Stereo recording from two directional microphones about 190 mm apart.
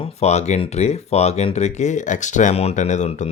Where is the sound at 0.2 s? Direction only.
35° left (ahead or behind).